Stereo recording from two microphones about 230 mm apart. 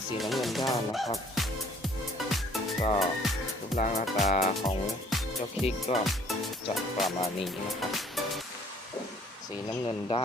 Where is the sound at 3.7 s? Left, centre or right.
Left.